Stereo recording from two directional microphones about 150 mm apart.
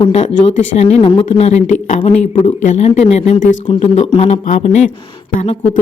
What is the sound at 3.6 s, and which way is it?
Speech, 35° left (ahead or behind).